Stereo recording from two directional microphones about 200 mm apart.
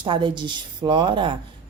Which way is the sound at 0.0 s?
25° right (ahead or behind).